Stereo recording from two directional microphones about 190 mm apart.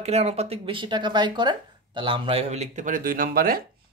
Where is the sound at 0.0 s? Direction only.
35° right (ahead or behind); by 3.6 s 50° right (ahead or behind).